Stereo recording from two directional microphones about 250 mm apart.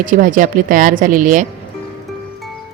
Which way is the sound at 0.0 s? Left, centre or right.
Right.